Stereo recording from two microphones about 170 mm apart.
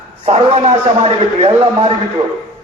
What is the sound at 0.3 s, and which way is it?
A man's voice, 35° right (ahead or behind).